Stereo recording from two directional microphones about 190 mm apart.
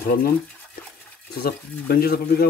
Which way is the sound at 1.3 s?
55° left (ahead or behind).